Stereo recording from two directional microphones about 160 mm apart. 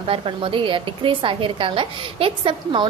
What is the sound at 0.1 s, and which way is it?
A woman's voice, 35° right (ahead or behind).